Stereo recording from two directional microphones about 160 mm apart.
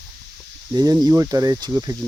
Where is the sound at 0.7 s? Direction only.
25° right (ahead or behind).